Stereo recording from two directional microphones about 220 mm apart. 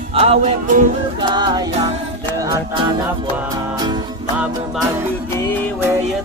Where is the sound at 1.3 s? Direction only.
20° right (ahead or behind).